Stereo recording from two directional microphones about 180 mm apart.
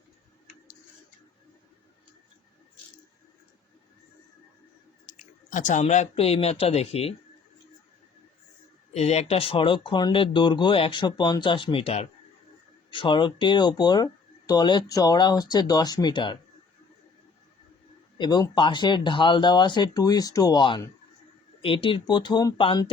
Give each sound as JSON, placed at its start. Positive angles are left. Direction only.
{"t": 5.0, "sound": "speech", "side_deg": 45}
{"t": 8.9, "sound": "speech", "side_deg": 35}
{"t": 18.2, "sound": "speech", "side_deg": 25}